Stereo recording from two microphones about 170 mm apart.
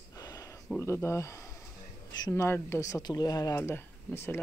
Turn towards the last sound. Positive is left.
turn(degrees=15)  # may be behind; listen again after turning